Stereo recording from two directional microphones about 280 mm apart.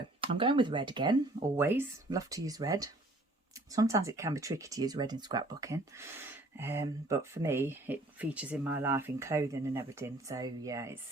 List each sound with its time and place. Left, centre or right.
0.2 s speech: centre